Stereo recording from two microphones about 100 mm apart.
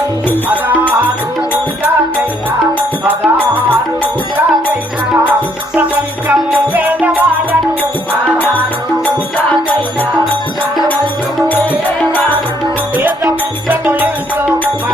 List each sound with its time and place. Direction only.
0.4 s music: 15° right (ahead or behind)
3.1 s music: 20° right (ahead or behind)
6.2 s music: 15° right (ahead or behind)